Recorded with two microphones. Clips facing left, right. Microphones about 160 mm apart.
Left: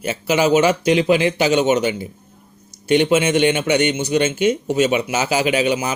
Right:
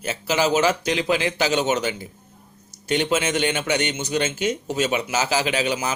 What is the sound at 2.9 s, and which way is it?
A man's voice, 15° left (ahead or behind).